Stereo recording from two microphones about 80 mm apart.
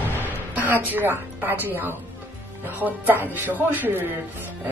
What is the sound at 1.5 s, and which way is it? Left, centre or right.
Speech, left.